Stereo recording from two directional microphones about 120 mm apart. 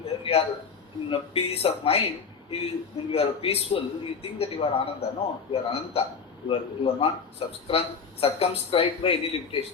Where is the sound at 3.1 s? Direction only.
55° left (ahead or behind).